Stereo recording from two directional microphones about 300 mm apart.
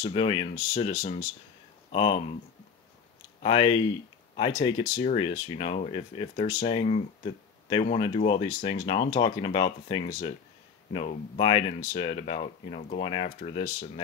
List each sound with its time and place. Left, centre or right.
0.0 s speech: centre
3.4 s speech: centre